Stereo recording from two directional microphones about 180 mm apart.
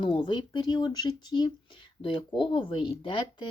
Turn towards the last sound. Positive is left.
turn(degrees=25)  # may be behind; listen again after turning